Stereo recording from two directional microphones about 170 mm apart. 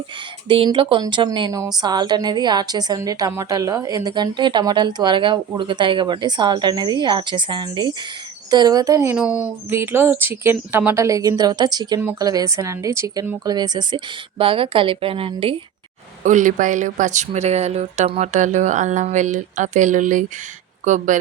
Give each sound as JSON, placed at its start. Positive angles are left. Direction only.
{"t": 0.4, "sound": "a woman's voice", "side_deg": -30}
{"t": 16.2, "sound": "speech", "side_deg": -50}